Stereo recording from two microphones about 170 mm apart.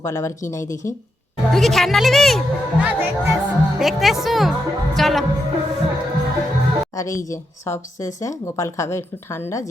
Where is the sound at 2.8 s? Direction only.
10° right (ahead or behind).